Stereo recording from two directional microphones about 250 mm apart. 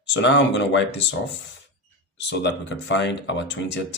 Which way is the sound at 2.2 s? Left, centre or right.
Left.